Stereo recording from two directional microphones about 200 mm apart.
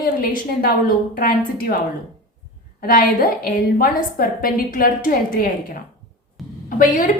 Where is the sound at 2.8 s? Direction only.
45° left (ahead or behind).